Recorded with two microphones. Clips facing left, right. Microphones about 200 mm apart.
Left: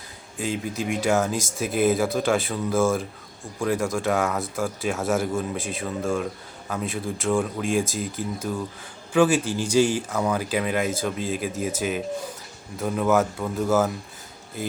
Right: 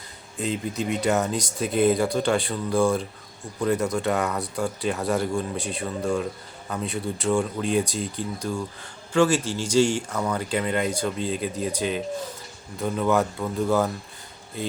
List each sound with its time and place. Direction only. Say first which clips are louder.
0.3 s speech: even; centre (ahead or behind)